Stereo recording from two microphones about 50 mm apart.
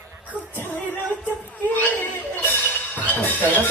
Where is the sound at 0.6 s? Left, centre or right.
Left.